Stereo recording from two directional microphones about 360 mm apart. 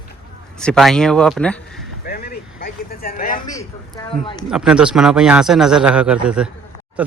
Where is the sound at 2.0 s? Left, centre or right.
Left.